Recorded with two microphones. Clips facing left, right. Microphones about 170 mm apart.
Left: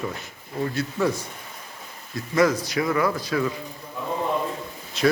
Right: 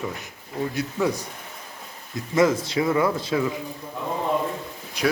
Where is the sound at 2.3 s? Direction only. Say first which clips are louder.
Right 1 dB; 25° right (ahead or behind).